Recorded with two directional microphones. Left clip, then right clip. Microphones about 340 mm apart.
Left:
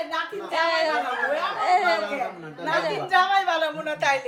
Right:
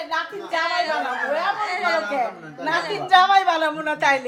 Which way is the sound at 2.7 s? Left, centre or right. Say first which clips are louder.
Right 4 dB; right.